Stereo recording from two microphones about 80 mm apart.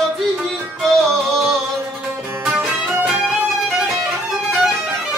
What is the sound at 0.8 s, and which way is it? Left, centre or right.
Music, centre.